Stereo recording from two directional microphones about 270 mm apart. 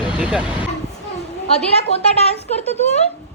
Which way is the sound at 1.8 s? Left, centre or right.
Left.